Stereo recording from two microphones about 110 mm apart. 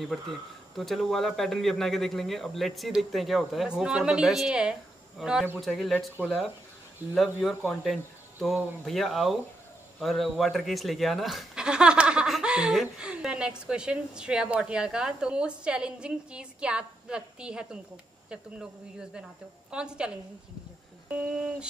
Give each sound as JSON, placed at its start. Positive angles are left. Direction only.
{"t": 0.7, "sound": "a woman's voice", "side_deg": 0}
{"t": 7.0, "sound": "a woman's voice", "side_deg": -15}
{"t": 7.8, "sound": "a woman's voice", "side_deg": 0}